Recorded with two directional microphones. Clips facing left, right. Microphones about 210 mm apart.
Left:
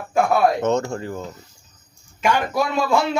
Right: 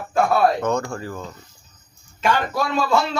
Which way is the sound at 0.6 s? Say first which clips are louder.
Left 2 dB; 25° left (ahead or behind).